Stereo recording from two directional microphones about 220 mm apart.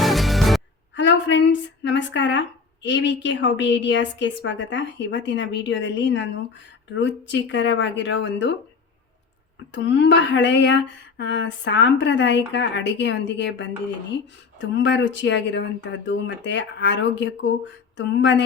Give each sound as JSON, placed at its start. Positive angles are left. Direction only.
{"t": 0.0, "sound": "music", "side_deg": 0}
{"t": 0.9, "sound": "a woman's voice", "side_deg": 55}
{"t": 9.7, "sound": "a woman's voice", "side_deg": 55}